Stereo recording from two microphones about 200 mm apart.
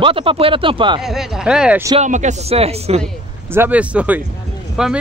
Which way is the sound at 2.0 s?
35° right (ahead or behind).